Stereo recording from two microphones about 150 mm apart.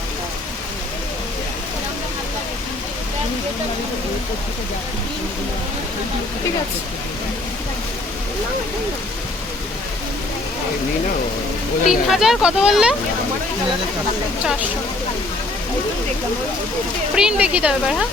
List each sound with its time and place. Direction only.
11.9 s speech: centre (ahead or behind)
17.2 s speech: 5° right (ahead or behind)